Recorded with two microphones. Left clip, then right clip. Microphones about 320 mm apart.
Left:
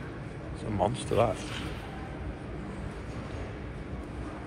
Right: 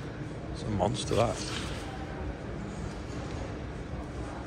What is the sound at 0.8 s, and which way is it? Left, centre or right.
Speech, centre.